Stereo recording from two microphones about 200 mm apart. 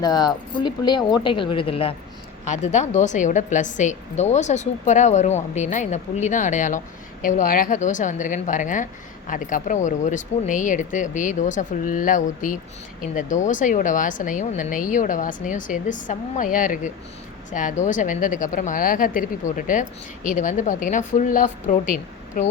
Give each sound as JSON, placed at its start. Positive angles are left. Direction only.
{"t": 0.0, "sound": "a woman's voice", "side_deg": 20}